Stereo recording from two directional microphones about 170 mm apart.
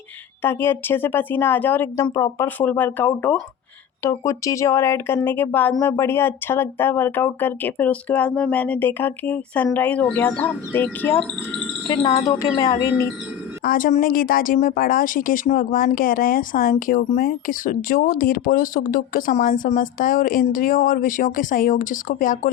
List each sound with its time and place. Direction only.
0.4 s speech: 10° left (ahead or behind)
11.9 s speech: 20° left (ahead or behind)
13.7 s speech: 55° left (ahead or behind)